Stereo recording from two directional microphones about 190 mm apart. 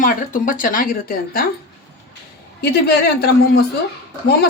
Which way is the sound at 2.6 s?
55° left (ahead or behind).